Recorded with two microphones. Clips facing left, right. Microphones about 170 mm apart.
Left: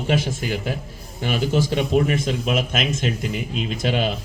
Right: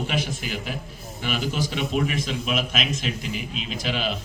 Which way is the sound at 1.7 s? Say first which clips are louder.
Left 5 dB; 45° left (ahead or behind).